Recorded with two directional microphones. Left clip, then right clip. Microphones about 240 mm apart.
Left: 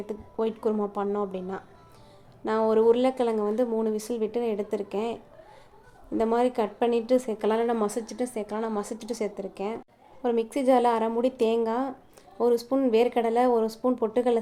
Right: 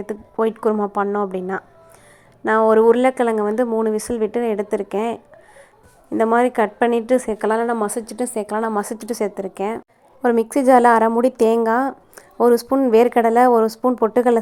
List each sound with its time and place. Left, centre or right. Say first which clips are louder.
0.0 s a woman's voice: right 9 dB; right